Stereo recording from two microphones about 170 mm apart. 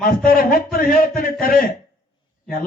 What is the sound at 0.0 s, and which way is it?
A man's voice, 55° left (ahead or behind).